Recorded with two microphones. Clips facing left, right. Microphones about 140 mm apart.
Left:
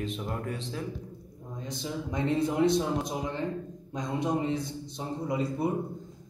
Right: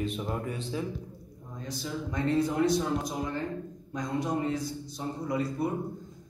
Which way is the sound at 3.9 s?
20° left (ahead or behind).